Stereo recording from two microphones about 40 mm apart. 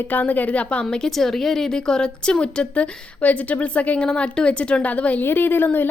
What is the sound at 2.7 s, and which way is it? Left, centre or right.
A woman's voice, left.